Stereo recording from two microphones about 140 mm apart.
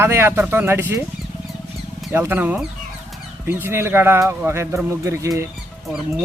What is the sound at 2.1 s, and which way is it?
Speech, 15° right (ahead or behind).